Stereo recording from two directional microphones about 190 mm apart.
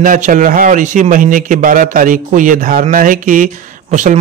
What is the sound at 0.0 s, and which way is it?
A man's voice, 45° right (ahead or behind).